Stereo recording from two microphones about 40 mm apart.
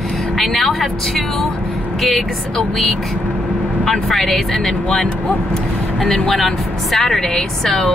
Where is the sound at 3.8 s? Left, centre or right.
Centre.